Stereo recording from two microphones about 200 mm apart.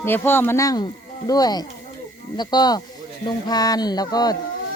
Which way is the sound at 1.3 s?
20° left (ahead or behind).